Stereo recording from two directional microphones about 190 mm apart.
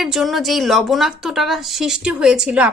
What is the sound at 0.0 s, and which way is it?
A woman's voice, centre (ahead or behind).